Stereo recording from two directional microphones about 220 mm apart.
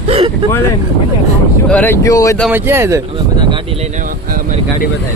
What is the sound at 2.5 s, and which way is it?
Speech, 10° right (ahead or behind).